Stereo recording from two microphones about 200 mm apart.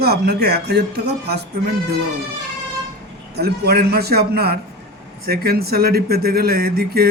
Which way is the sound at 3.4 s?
50° right (ahead or behind).